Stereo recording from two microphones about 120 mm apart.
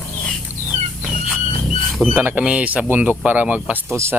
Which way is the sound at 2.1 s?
15° right (ahead or behind).